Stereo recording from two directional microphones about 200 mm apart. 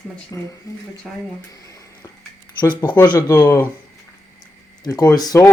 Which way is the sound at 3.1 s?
20° left (ahead or behind).